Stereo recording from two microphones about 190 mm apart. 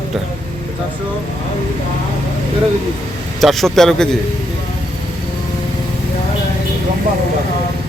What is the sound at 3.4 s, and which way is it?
Speech, centre (ahead or behind).